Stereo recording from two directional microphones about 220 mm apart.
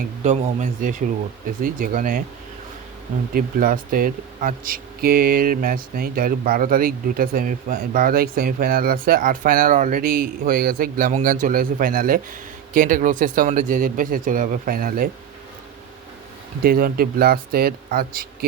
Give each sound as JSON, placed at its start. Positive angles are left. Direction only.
{"t": 0.2, "sound": "speech", "side_deg": -35}
{"t": 3.3, "sound": "speech", "side_deg": -40}
{"t": 16.6, "sound": "speech", "side_deg": -40}